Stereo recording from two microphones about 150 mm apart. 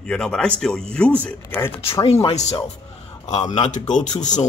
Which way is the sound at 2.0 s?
40° left (ahead or behind).